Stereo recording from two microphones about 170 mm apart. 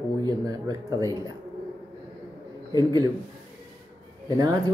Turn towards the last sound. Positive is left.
turn(degrees=-20)  # may be behind; listen again after turning